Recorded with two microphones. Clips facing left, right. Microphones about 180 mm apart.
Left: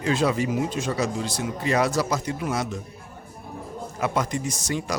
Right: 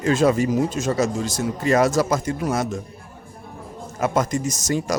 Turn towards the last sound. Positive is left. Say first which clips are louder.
# right 5 dB
turn(degrees=-45)  # may be behind; listen again after turning